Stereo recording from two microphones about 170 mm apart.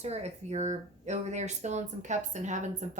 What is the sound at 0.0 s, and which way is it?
A woman's voice, 40° right (ahead or behind).